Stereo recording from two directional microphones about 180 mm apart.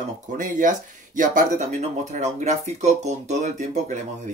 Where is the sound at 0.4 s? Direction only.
45° right (ahead or behind).